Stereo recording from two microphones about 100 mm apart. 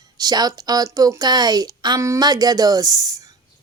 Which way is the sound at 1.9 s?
30° right (ahead or behind).